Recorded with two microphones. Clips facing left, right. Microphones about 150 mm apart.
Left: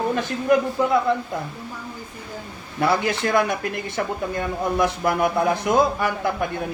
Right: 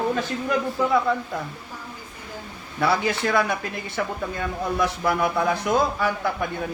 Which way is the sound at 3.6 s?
60° left (ahead or behind).